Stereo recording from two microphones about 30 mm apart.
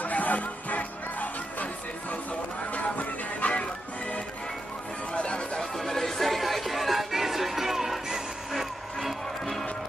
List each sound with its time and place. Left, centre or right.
0.0 s music: left
5.1 s chatter: left
5.6 s music: centre